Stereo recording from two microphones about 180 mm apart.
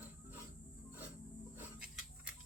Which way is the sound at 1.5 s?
5° right (ahead or behind).